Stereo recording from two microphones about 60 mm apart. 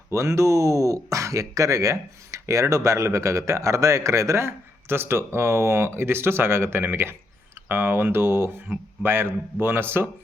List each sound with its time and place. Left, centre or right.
0.1 s speech: right